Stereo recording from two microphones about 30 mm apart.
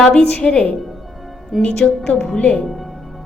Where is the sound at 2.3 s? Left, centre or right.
Left.